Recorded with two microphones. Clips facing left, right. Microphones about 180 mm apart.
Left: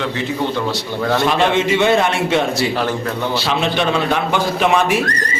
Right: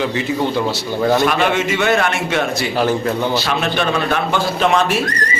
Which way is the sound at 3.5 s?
20° left (ahead or behind).